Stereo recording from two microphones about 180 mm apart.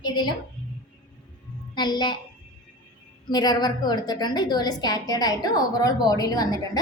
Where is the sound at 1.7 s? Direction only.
25° left (ahead or behind).